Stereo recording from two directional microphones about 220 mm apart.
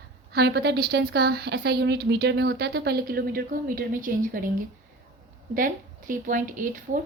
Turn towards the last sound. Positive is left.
turn(degrees=-35)  # may be behind; listen again after turning